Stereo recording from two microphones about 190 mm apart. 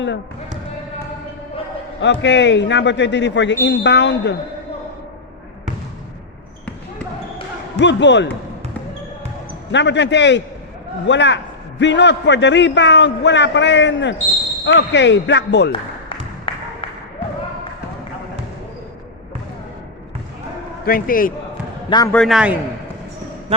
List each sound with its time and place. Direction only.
2.0 s a man's voice: 70° left (ahead or behind)
7.8 s a man's voice: 65° left (ahead or behind)
9.7 s a man's voice: 65° left (ahead or behind)
16.5 s music: 25° left (ahead or behind)
20.8 s a man's voice: 50° left (ahead or behind)
21.8 s speech: 20° left (ahead or behind)
22.1 s a man's voice: centre (ahead or behind)